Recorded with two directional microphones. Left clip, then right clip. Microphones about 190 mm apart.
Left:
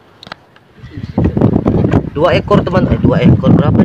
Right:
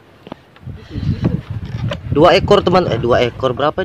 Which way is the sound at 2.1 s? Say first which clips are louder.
Right 3 dB; 15° right (ahead or behind).